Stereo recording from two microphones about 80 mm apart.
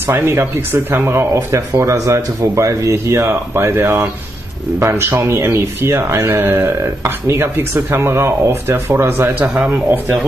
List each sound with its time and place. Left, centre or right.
0.0 s speech: right